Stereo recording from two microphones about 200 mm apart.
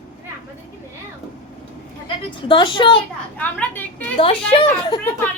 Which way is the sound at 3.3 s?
10° left (ahead or behind).